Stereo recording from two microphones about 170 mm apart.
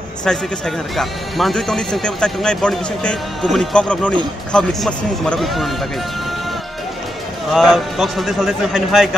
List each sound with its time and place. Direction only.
0.2 s speech: 5° left (ahead or behind)
7.5 s speech: centre (ahead or behind)